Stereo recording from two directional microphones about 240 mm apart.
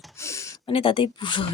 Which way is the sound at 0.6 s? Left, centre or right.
Left.